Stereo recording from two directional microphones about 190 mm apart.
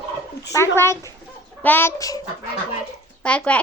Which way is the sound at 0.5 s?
15° left (ahead or behind).